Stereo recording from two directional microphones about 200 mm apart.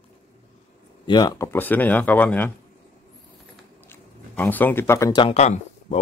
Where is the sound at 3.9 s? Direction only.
10° left (ahead or behind).